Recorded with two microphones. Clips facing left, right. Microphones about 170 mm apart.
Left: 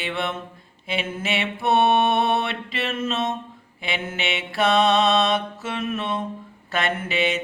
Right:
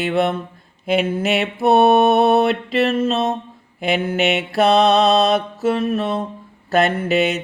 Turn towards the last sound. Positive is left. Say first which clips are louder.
# right 6 dB
turn(degrees=-40)  # may be behind; listen again after turning